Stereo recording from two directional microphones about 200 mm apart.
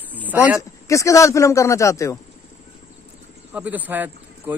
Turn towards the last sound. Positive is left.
turn(degrees=-10)  # may be behind; listen again after turning